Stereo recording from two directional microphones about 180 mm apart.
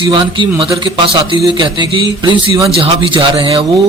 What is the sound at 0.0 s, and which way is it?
A man's voice, 30° right (ahead or behind).